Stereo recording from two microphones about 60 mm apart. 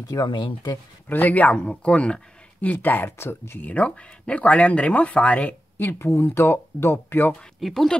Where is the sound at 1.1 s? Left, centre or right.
Left.